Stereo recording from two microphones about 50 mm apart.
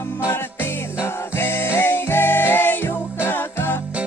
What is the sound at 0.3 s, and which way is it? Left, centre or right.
Music, left.